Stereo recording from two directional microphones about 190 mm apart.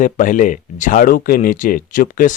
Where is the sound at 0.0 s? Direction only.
45° left (ahead or behind).